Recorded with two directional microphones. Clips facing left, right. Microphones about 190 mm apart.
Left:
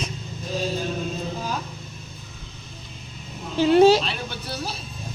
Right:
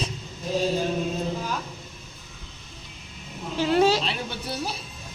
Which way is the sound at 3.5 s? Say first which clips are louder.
Left 6 dB; 25° left (ahead or behind).